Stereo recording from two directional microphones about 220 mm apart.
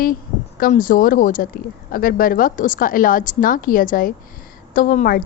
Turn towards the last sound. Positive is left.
turn(degrees=40)  # may be behind; listen again after turning